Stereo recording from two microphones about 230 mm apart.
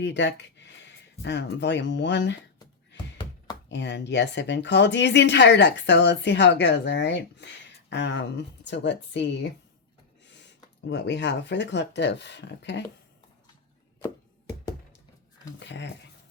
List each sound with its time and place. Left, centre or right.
0.0 s speech: left
3.7 s speech: left
10.8 s speech: left
15.5 s speech: left